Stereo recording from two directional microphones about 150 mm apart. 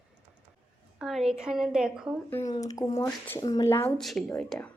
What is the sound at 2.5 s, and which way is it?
Speech, 25° left (ahead or behind).